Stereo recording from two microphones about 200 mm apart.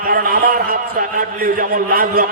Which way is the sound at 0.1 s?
45° right (ahead or behind).